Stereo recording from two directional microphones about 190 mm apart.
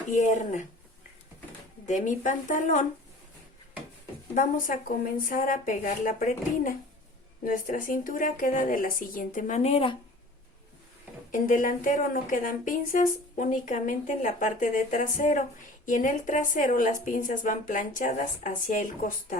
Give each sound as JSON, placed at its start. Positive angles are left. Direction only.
{"t": 0.1, "sound": "speech", "side_deg": 40}
{"t": 1.9, "sound": "speech", "side_deg": 40}
{"t": 4.4, "sound": "speech", "side_deg": 45}
{"t": 11.3, "sound": "speech", "side_deg": 45}